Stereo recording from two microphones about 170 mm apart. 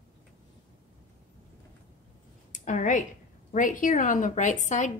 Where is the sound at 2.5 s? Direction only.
45° left (ahead or behind).